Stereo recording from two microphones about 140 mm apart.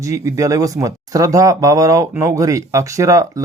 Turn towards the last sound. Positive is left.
turn(degrees=-25)  # may be behind; listen again after turning